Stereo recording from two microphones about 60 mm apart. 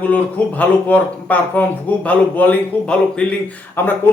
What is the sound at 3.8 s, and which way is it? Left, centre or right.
Speech, left.